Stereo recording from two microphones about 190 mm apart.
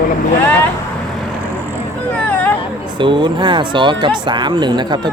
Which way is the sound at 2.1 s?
10° left (ahead or behind).